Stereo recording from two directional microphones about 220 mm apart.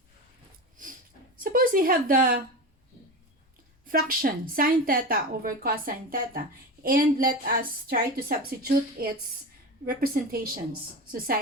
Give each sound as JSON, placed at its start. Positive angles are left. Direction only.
{"t": 1.5, "sound": "speech", "side_deg": -40}
{"t": 3.8, "sound": "a woman's voice", "side_deg": -40}